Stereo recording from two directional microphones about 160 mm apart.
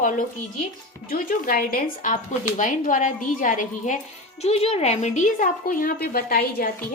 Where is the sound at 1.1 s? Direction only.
60° left (ahead or behind).